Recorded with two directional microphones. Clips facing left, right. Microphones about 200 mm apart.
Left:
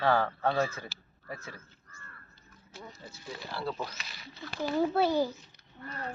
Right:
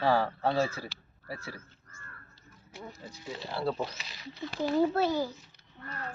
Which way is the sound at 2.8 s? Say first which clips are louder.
Right 3 dB; 15° right (ahead or behind).